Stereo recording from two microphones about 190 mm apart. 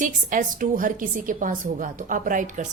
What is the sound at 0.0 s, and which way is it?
A woman's voice, 45° right (ahead or behind).